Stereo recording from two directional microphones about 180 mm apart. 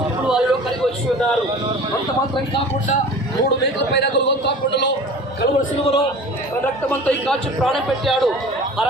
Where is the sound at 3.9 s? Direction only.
75° left (ahead or behind).